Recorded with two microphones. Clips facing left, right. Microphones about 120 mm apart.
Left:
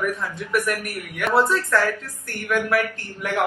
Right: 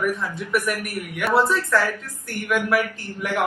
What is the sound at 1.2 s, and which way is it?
Speech, 10° right (ahead or behind).